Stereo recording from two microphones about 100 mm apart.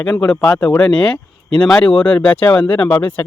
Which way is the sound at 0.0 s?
10° left (ahead or behind).